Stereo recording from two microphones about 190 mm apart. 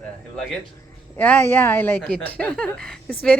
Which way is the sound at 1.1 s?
10° left (ahead or behind).